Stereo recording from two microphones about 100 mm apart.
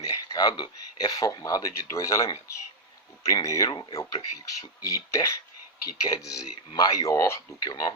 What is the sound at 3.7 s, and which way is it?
Speech, 50° left (ahead or behind).